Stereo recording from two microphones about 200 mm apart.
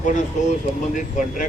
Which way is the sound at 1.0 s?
40° left (ahead or behind).